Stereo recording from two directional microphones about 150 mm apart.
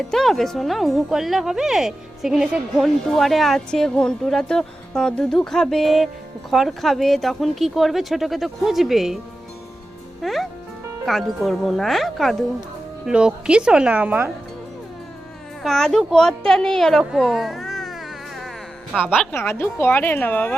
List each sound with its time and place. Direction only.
0.0 s speech: 5° left (ahead or behind)
10.2 s speech: centre (ahead or behind)
15.6 s a child's voice: 5° left (ahead or behind)
19.3 s a woman's voice: 15° left (ahead or behind)